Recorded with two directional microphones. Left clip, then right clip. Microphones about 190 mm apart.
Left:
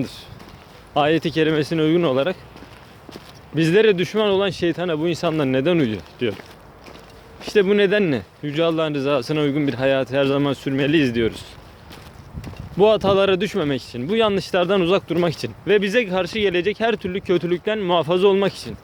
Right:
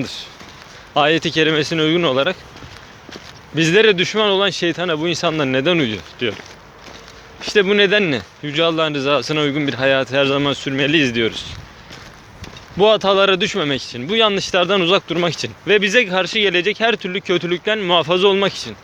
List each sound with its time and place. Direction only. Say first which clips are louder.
0.0 s speech: right 4 dB; 20° left (ahead or behind)
3.5 s speech: right 3 dB; 20° left (ahead or behind)
7.4 s speech: right 3 dB; 25° left (ahead or behind)
12.7 s speech: right 2 dB; 25° left (ahead or behind)